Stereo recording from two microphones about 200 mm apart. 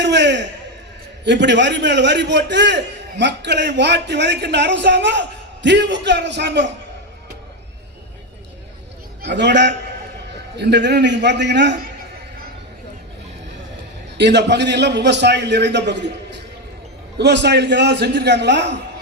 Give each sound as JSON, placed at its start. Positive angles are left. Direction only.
{"t": 0.0, "sound": "a sound", "side_deg": -60}
{"t": 1.2, "sound": "a man's voice", "side_deg": -60}
{"t": 9.2, "sound": "a man's voice", "side_deg": -60}
{"t": 14.2, "sound": "a man's voice", "side_deg": -60}
{"t": 17.2, "sound": "a man's voice", "side_deg": -60}